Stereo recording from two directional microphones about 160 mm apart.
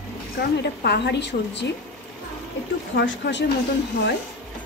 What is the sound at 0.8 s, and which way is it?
Speech, 90° left.